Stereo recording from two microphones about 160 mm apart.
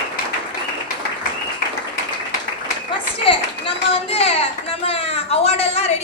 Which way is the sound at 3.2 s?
35° left (ahead or behind).